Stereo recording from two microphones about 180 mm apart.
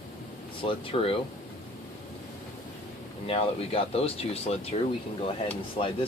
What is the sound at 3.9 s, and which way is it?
Speech, 35° left (ahead or behind).